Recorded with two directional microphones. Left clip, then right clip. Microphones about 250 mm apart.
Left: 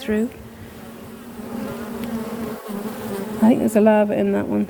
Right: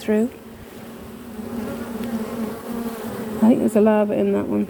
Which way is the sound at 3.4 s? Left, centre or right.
Left.